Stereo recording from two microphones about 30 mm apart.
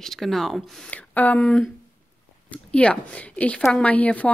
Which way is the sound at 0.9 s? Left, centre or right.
Left.